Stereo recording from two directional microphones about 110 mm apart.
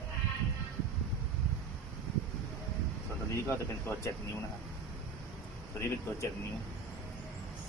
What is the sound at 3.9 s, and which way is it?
Speech, 15° left (ahead or behind).